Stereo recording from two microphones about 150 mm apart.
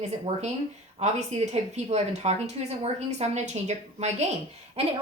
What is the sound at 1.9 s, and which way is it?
A woman's voice, 45° right (ahead or behind).